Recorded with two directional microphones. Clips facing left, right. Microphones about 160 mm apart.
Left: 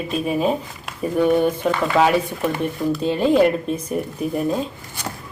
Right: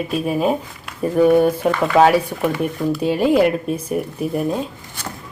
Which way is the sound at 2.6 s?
10° right (ahead or behind).